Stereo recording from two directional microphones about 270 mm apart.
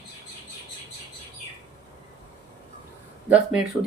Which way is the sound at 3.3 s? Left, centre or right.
Centre.